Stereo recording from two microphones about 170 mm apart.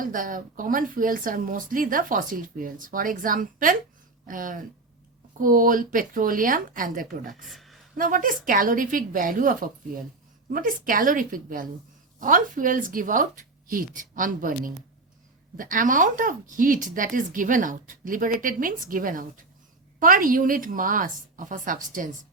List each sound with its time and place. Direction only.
0.0 s speech: 55° right (ahead or behind)
7.4 s a sound: centre (ahead or behind)
7.9 s speech: 50° right (ahead or behind)